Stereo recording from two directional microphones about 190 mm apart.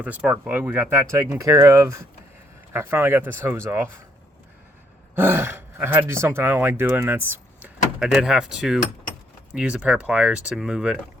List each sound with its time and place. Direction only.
0.0 s speech: 5° right (ahead or behind)
5.1 s speech: 10° right (ahead or behind)